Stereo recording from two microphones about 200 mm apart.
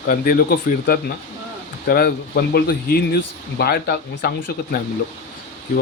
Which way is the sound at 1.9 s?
50° left (ahead or behind).